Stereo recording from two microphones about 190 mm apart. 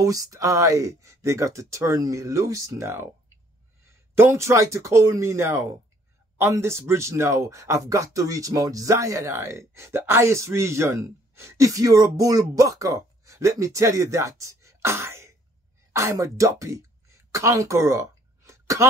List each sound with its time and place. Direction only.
0.0 s speech: 15° right (ahead or behind)